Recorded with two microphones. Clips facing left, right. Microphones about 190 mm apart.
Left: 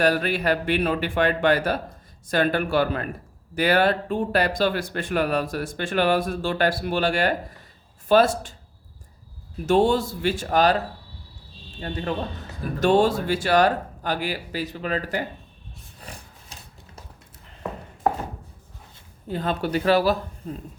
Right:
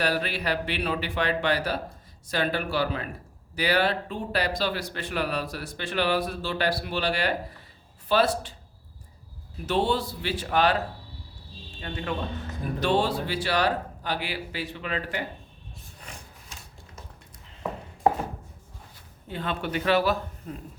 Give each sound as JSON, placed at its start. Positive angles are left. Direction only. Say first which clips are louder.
{"t": 0.0, "sound": "speech", "louder": "left 6 dB", "side_deg": 50}
{"t": 9.6, "sound": "speech", "louder": "left 6 dB", "side_deg": 45}
{"t": 11.8, "sound": "a man's voice", "louder": "left 4 dB", "side_deg": 40}
{"t": 16.0, "sound": "a sound", "louder": "left 3 dB", "side_deg": 35}
{"t": 19.3, "sound": "a man's voice", "louder": "left 5 dB", "side_deg": 40}